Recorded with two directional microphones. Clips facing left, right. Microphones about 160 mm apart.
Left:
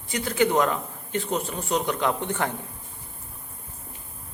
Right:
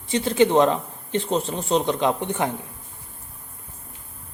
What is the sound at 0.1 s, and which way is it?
A man's voice, 25° right (ahead or behind).